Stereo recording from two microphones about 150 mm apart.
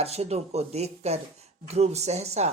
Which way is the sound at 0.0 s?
45° right (ahead or behind).